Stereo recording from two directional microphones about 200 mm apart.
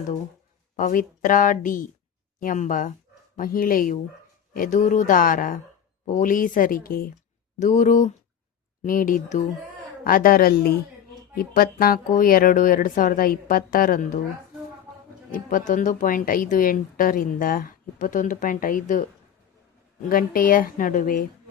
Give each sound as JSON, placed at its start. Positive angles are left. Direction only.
{"t": 0.8, "sound": "speech", "side_deg": 40}
{"t": 15.3, "sound": "speech", "side_deg": 40}
{"t": 20.1, "sound": "speech", "side_deg": 45}